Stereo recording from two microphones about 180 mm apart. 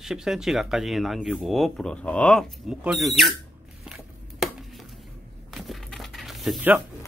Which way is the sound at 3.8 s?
5° right (ahead or behind).